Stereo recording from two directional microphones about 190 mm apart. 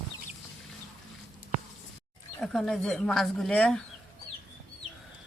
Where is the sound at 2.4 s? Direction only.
5° left (ahead or behind).